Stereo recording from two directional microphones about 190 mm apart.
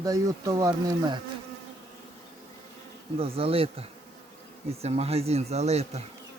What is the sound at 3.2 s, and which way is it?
Speech, 30° right (ahead or behind).